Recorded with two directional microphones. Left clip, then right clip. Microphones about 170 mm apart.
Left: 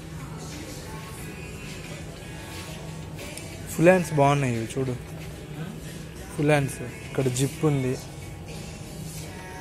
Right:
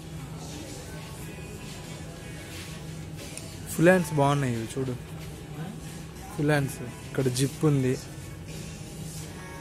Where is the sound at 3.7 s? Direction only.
20° right (ahead or behind).